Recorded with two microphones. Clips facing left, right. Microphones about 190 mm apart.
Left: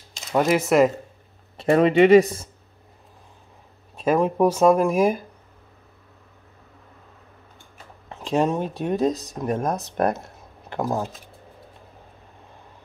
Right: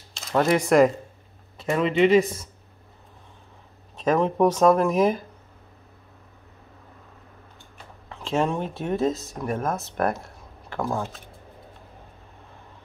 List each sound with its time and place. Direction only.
0.3 s speech: 10° left (ahead or behind)
1.6 s speech: 55° left (ahead or behind)
3.9 s speech: 10° left (ahead or behind)
8.1 s speech: 15° left (ahead or behind)